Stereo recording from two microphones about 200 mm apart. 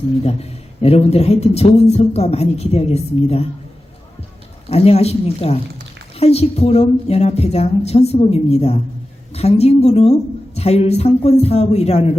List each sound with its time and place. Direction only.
0.3 s a man's voice: 30° left (ahead or behind)
4.7 s a man's voice: 30° left (ahead or behind)